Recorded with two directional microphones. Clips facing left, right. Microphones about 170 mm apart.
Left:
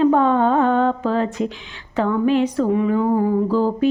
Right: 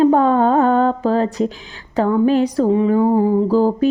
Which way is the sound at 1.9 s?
35° right (ahead or behind).